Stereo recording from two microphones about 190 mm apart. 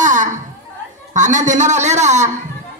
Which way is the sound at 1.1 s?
40° right (ahead or behind).